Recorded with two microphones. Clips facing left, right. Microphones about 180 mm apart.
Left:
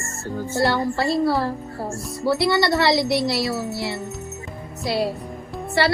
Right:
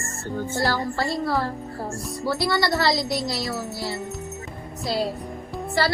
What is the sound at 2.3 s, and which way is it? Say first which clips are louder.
Speech: left 4 dB; 25° left (ahead or behind).